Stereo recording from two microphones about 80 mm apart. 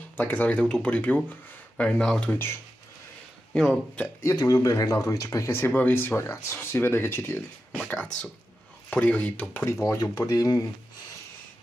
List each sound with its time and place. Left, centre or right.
0.2 s speech: centre
3.5 s speech: centre
4.4 s speech: left
5.8 s speech: left
7.9 s speech: centre
9.7 s speech: left